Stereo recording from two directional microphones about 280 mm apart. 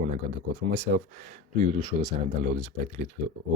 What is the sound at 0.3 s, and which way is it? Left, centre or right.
Speech, right.